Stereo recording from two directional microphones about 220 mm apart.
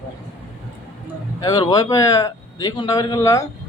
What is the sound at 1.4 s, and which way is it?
A man's voice, 15° left (ahead or behind).